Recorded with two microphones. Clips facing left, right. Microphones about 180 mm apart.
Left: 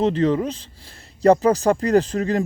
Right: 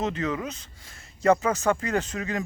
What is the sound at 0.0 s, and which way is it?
Speech, 30° left (ahead or behind).